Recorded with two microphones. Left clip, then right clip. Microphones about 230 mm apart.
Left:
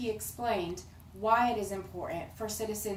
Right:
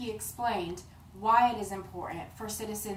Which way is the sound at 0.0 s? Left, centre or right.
Centre.